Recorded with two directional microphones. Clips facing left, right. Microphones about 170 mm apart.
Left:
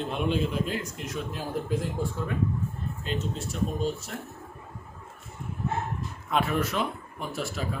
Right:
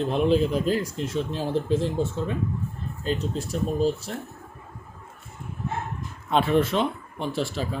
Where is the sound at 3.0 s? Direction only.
35° right (ahead or behind).